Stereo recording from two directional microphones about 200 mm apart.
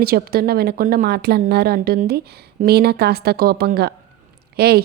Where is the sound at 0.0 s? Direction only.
50° right (ahead or behind).